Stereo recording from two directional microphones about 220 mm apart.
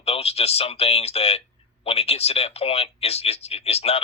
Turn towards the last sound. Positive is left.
turn(degrees=30)  # may be behind; listen again after turning